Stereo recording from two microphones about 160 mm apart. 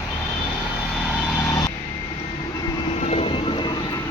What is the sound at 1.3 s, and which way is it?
Vehicle, 20° left (ahead or behind).